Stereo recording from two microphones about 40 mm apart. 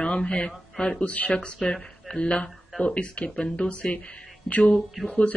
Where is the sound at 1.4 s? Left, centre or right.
Left.